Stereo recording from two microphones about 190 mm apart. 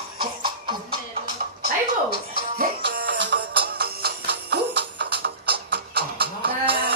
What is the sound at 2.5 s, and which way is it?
Music, 50° right (ahead or behind).